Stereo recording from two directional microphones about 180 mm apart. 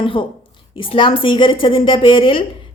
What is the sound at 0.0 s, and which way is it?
A woman's voice, 30° left (ahead or behind).